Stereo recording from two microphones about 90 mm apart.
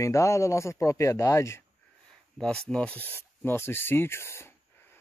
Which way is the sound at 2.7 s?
15° left (ahead or behind).